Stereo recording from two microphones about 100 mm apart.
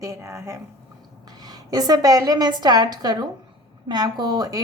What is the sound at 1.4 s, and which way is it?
A woman's voice, 40° right (ahead or behind).